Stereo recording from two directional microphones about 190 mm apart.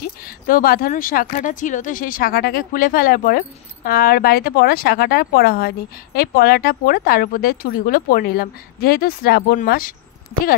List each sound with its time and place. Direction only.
0.5 s speech: 50° left (ahead or behind)